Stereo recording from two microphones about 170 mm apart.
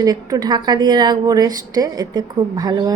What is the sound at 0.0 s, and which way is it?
A woman's voice, 20° right (ahead or behind).